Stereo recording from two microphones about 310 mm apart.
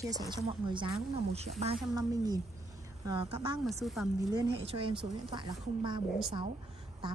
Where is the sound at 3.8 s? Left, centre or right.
Centre.